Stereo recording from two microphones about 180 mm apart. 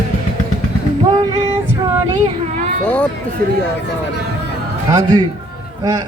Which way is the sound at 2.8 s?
5° left (ahead or behind).